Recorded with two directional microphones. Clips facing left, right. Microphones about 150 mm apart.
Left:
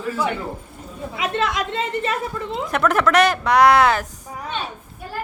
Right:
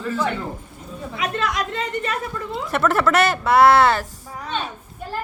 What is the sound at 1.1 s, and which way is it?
Speech, 25° left (ahead or behind).